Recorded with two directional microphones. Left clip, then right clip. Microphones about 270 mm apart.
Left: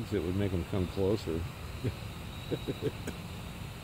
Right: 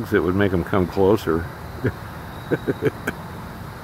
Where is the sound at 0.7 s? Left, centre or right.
Right.